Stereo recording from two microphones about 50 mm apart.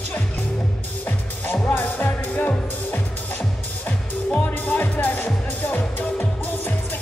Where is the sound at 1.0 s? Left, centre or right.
Left.